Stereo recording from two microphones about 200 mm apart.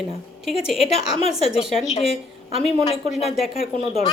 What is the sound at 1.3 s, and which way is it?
A woman's voice, 30° left (ahead or behind).